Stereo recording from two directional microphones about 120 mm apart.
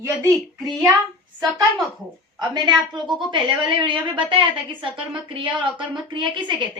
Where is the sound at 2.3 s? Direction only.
40° right (ahead or behind).